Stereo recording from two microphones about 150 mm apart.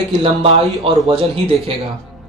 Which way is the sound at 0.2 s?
40° right (ahead or behind).